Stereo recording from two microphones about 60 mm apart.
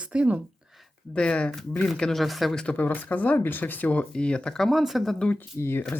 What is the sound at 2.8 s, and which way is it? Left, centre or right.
Speech, left.